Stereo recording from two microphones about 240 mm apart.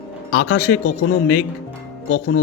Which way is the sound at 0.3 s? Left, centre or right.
Left.